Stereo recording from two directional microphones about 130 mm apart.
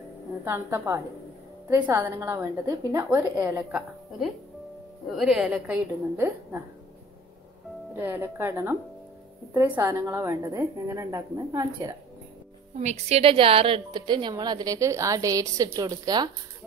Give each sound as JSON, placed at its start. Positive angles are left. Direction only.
{"t": 0.5, "sound": "a woman's voice", "side_deg": -20}
{"t": 5.0, "sound": "a woman's voice", "side_deg": 0}
{"t": 7.9, "sound": "a woman's voice", "side_deg": -15}
{"t": 12.7, "sound": "a woman's voice", "side_deg": -60}